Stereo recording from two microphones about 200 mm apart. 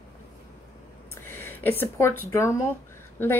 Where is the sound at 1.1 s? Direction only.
10° left (ahead or behind).